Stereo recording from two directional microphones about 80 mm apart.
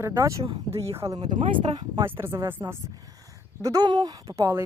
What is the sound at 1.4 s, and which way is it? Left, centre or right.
Speech, right.